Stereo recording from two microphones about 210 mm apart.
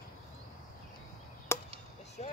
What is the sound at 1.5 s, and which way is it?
Chop, 10° left (ahead or behind).